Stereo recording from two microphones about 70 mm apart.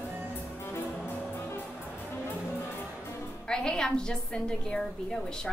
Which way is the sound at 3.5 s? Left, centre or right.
Centre.